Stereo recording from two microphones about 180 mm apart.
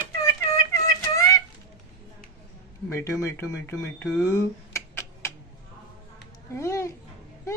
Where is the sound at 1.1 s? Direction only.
20° left (ahead or behind).